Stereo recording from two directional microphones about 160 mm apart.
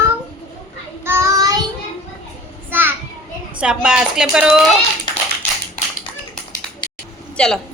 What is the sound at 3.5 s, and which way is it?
A woman's voice, 5° right (ahead or behind).